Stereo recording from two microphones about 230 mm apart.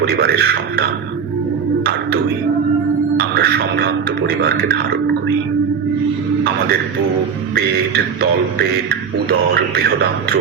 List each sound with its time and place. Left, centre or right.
0.0 s speech: right
3.2 s music: right
4.3 s speech: right
7.5 s speech: right